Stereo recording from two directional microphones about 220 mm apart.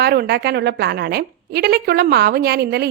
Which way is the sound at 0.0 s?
45° right (ahead or behind).